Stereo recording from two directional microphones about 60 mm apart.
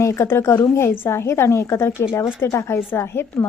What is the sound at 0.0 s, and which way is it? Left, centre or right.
A woman's voice, left.